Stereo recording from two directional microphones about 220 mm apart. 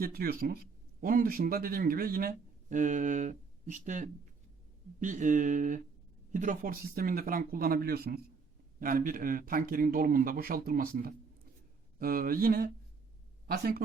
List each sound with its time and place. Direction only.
0.0 s speech: 45° right (ahead or behind)